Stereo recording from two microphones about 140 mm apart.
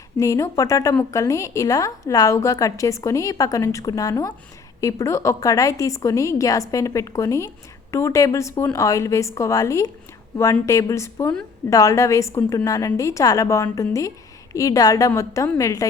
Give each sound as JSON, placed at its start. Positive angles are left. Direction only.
{"t": 0.2, "sound": "a woman's voice", "side_deg": 20}